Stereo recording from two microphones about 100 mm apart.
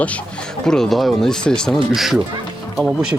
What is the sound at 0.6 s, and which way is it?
Speech, 5° left (ahead or behind).